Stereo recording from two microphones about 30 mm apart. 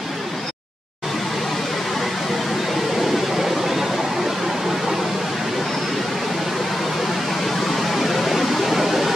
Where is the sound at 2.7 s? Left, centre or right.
Centre.